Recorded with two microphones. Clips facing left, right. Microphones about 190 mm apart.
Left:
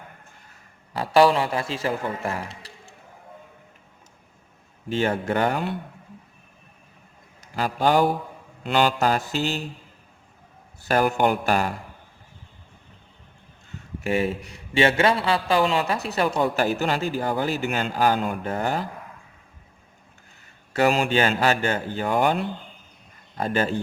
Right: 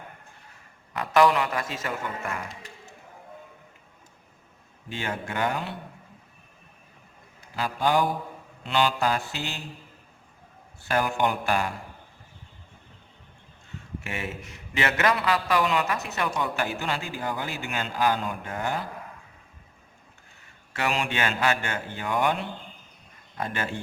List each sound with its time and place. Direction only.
0.9 s a man's voice: 30° left (ahead or behind)
4.9 s a man's voice: 40° left (ahead or behind)
7.4 s a man's voice: 45° left (ahead or behind)
8.6 s mantra: 45° left (ahead or behind)
10.8 s a man's voice: 40° left (ahead or behind)
14.0 s a man's voice: 35° left (ahead or behind)
20.7 s a man's voice: 40° left (ahead or behind)